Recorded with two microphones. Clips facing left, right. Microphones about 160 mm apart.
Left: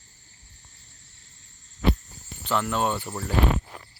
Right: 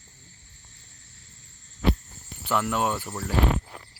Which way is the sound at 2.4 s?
10° right (ahead or behind).